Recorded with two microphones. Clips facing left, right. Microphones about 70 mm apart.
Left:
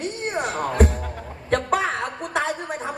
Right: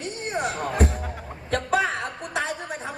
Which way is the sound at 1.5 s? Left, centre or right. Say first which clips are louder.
Left 2 dB; left.